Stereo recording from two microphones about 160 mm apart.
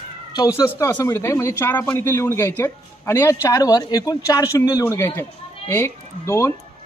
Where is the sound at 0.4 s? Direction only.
20° left (ahead or behind).